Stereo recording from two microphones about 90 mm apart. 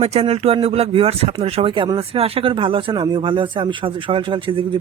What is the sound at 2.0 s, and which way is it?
Speech, 90° right.